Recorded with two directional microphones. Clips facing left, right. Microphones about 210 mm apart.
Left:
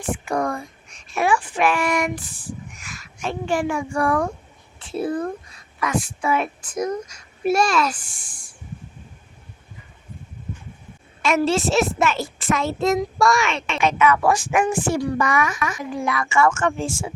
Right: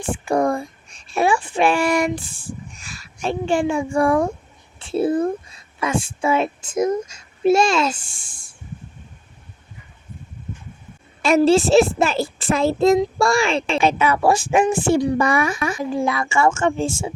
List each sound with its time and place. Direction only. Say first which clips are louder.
0.0 s a child's voice: right 4 dB; 30° right (ahead or behind)
11.2 s a child's voice: right 5 dB; 30° right (ahead or behind)